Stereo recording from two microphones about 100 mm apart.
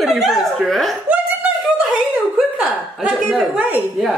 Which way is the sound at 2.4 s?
Centre (ahead or behind).